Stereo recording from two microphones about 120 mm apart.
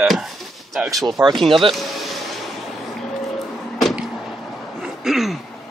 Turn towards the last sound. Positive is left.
turn(degrees=0)  # may be behind; listen again after turning